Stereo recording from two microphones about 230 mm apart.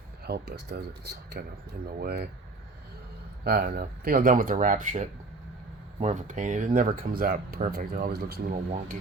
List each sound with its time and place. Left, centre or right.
0.3 s speech: right
3.4 s speech: right